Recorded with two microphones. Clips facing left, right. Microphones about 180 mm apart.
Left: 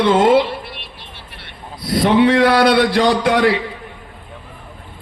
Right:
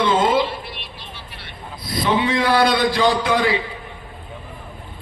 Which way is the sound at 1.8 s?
70° left (ahead or behind).